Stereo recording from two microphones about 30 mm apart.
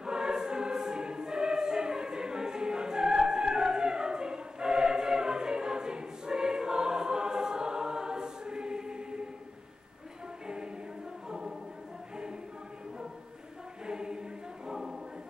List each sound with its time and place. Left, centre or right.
0.0 s choir: right
10.4 s choir: right
11.2 s choir: centre
13.8 s choir: right